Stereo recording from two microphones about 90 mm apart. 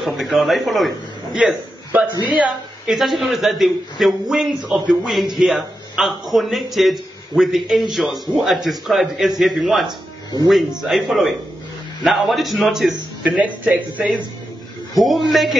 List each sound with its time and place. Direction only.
0.0 s a man's voice: centre (ahead or behind)
2.9 s a man's voice: centre (ahead or behind)
9.8 s speech: 50° right (ahead or behind)
10.5 s a man's voice: 5° right (ahead or behind)
13.4 s speech: 15° right (ahead or behind)
15.0 s a man's voice: centre (ahead or behind)